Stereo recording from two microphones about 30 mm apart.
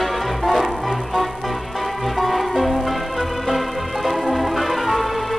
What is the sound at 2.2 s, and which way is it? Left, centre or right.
Music, centre.